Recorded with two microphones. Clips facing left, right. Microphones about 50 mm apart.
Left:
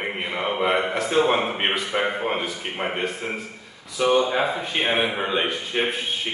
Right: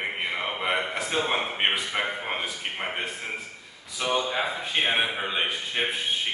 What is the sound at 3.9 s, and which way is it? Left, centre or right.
A man's voice, centre.